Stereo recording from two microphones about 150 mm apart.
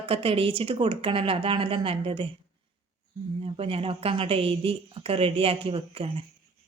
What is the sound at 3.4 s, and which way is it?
Speech, 40° right (ahead or behind).